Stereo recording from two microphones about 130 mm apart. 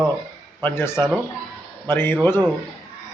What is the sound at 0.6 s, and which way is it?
A man's voice, 15° left (ahead or behind).